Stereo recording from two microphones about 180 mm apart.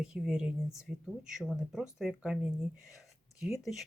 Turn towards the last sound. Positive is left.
turn(degrees=0)  # may be behind; listen again after turning